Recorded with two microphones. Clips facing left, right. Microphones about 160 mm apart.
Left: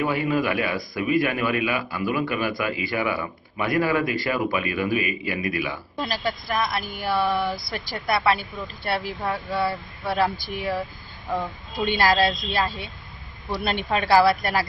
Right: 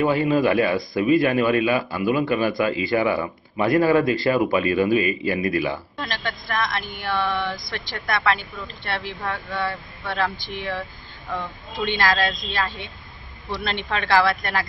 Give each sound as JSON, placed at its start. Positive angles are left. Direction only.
{"t": 0.0, "sound": "a man's voice", "side_deg": -25}
{"t": 6.0, "sound": "speech", "side_deg": 5}
{"t": 13.8, "sound": "speech", "side_deg": 10}